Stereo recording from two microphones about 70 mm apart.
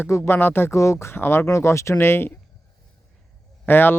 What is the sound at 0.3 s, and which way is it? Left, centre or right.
Speech, left.